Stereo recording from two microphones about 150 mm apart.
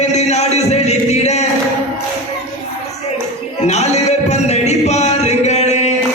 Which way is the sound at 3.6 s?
45° left (ahead or behind).